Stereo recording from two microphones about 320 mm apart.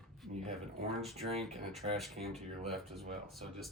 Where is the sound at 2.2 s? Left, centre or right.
Centre.